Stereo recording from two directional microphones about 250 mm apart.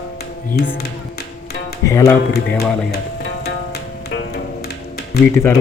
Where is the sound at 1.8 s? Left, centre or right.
Centre.